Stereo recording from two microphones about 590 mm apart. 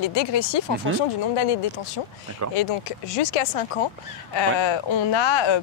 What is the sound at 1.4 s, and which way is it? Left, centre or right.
Speech, left.